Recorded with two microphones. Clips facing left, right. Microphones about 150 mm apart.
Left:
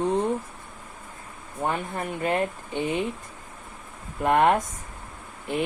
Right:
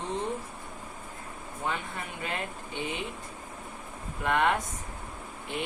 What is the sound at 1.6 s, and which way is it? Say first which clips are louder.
Speech: left 7 dB; 50° left (ahead or behind).